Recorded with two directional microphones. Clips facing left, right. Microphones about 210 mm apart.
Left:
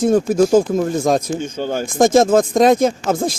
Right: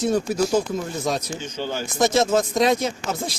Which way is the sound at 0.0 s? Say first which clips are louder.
Left 7 dB; 50° left (ahead or behind).